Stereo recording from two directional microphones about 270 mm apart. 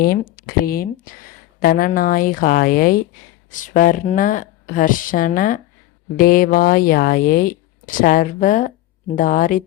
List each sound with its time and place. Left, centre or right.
0.0 s a woman's voice: left